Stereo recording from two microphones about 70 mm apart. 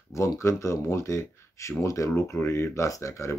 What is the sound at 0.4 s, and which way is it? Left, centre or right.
Speech, left.